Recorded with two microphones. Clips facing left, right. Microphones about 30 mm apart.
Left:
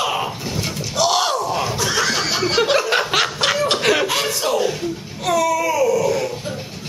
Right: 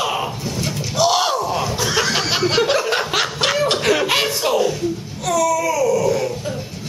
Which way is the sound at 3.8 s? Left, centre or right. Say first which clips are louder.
Even; centre.